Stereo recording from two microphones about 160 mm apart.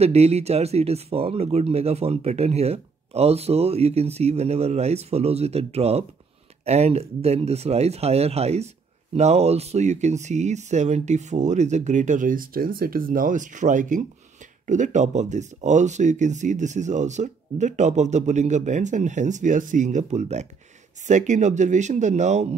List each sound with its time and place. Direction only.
0.0 s speech: 40° right (ahead or behind)